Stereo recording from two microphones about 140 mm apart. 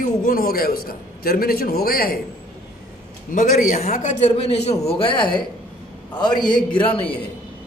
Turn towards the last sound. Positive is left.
turn(degrees=40)  # may be behind; listen again after turning